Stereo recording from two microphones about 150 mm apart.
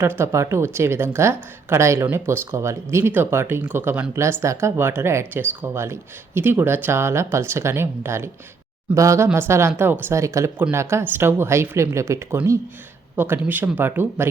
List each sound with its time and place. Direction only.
0.0 s a woman's voice: 15° right (ahead or behind)